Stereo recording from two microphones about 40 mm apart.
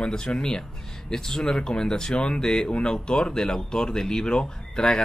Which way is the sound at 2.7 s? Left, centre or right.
Left.